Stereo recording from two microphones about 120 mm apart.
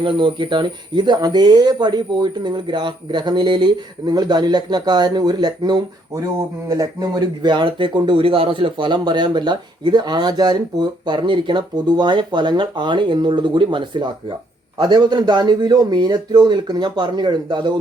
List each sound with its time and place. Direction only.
0.0 s speech: 45° right (ahead or behind)